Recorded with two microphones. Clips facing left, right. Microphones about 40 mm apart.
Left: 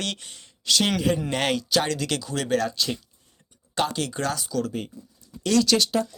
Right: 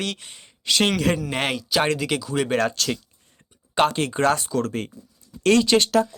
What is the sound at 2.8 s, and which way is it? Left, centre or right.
Speech, right.